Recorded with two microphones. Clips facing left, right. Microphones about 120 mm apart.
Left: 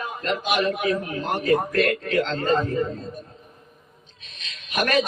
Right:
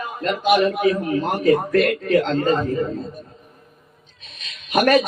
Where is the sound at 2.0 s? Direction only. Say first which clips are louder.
Right 5 dB; 40° right (ahead or behind).